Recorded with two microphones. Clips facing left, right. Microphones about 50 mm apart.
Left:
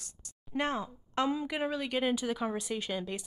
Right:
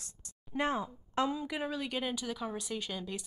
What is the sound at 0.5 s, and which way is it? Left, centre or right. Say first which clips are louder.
Speech: even; centre.